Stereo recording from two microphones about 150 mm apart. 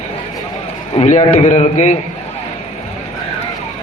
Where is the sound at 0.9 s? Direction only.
50° left (ahead or behind).